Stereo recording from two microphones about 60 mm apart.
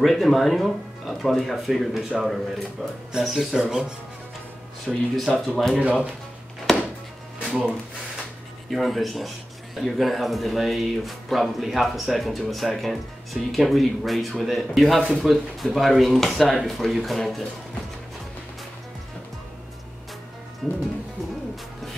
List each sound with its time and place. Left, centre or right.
0.0 s speech: centre
4.8 s speech: centre
5.8 s speech: right
7.3 s music: centre
8.6 s speech: centre
20.6 s speech: centre